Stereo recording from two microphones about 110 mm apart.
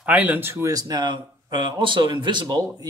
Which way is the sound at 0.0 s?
15° right (ahead or behind).